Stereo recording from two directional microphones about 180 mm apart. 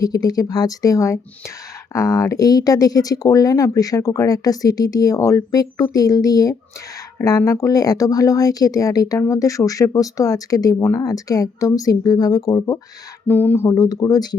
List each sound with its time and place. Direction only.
0.0 s speech: 20° left (ahead or behind)